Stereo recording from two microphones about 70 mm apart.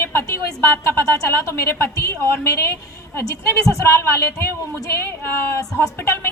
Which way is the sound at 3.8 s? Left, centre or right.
Left.